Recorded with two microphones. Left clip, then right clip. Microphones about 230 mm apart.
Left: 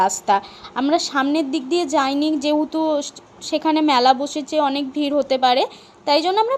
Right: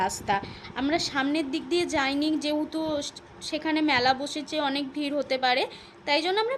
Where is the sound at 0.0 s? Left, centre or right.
Left.